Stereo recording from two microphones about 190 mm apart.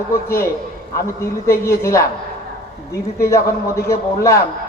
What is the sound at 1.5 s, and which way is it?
Speech, 15° left (ahead or behind).